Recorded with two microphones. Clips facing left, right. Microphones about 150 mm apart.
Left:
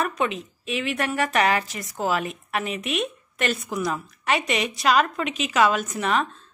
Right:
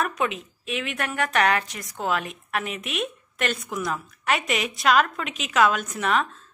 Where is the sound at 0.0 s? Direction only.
Centre (ahead or behind).